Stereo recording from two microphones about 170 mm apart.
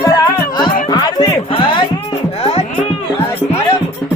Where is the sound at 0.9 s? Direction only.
25° left (ahead or behind).